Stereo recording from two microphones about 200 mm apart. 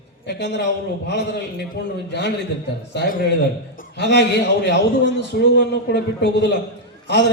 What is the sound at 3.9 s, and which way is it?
A man's voice, 60° left (ahead or behind).